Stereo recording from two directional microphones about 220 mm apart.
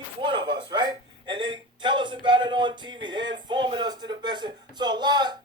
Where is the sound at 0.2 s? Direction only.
20° right (ahead or behind).